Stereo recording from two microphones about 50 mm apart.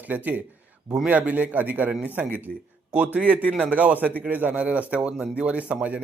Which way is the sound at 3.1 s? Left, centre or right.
Right.